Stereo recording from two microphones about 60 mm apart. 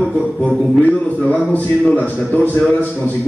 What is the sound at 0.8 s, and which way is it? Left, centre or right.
Speech, centre.